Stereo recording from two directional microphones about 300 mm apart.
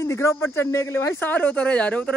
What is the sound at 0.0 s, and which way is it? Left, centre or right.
Speech, centre.